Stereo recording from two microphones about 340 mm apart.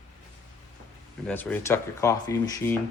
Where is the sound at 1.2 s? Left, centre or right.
Centre.